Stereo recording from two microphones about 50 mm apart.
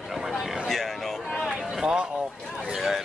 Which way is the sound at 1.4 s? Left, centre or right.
Centre.